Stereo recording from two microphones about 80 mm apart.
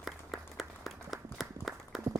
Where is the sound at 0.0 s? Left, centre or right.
Centre.